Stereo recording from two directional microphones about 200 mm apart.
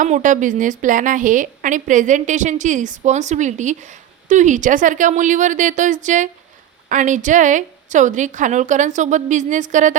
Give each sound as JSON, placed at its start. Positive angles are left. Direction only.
{"t": 0.0, "sound": "a woman's voice", "side_deg": -40}